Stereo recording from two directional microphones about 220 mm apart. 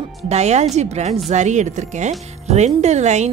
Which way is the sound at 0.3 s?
30° right (ahead or behind).